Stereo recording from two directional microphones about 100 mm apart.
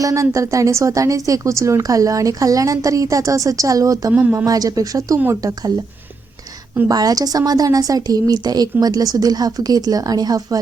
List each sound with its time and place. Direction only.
0.0 s a woman's voice: 30° right (ahead or behind)
4.1 s speech: 15° right (ahead or behind)
4.4 s a woman's voice: 35° right (ahead or behind)
6.8 s a woman's voice: 40° right (ahead or behind)